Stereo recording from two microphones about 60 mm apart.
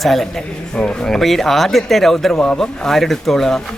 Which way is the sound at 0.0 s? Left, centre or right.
Centre.